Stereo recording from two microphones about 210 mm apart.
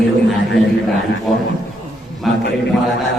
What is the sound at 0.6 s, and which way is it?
Speech, centre (ahead or behind).